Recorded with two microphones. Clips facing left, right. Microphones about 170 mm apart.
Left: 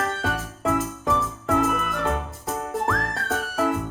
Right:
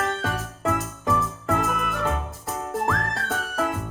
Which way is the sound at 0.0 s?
Centre (ahead or behind).